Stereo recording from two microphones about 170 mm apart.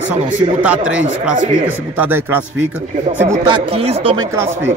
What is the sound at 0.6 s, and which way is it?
Speech, 10° right (ahead or behind).